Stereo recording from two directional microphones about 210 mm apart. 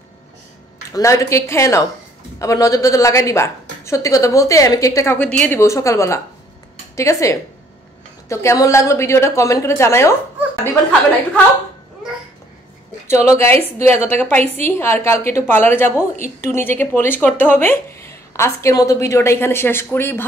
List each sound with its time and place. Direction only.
0.9 s speech: 15° left (ahead or behind)
13.0 s speech: 10° left (ahead or behind)